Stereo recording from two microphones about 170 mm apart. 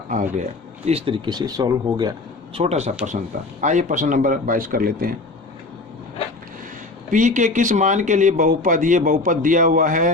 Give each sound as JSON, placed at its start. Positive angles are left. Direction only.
{"t": 0.1, "sound": "speech", "side_deg": -50}
{"t": 0.9, "sound": "speech", "side_deg": -35}
{"t": 2.6, "sound": "speech", "side_deg": -40}
{"t": 7.1, "sound": "speech", "side_deg": -45}